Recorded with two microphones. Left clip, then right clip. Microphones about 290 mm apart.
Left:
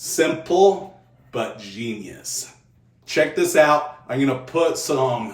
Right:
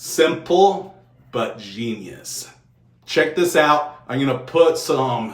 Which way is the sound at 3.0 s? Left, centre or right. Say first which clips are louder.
Right 1 dB; centre.